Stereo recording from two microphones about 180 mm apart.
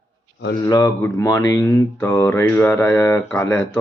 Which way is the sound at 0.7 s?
15° left (ahead or behind).